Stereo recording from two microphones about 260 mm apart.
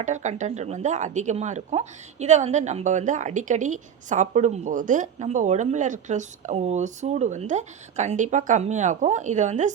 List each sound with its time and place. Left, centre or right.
0.0 s speech: right